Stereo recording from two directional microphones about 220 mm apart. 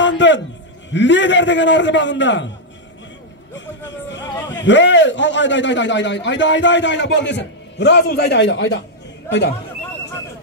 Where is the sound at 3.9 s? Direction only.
55° left (ahead or behind).